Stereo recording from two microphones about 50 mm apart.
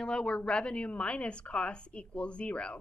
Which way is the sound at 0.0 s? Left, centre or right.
Centre.